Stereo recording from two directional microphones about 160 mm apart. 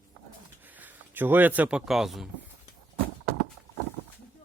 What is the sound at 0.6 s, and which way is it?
Speech, 10° right (ahead or behind).